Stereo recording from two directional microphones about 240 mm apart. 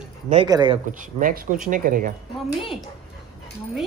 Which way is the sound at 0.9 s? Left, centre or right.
Right.